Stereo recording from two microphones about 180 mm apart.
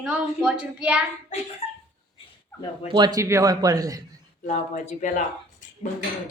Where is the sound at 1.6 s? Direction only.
35° left (ahead or behind).